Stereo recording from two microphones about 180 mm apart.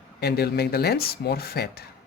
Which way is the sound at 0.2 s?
60° left (ahead or behind).